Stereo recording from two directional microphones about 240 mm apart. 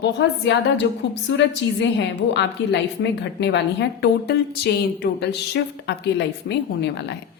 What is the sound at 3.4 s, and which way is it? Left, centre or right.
A woman's voice, left.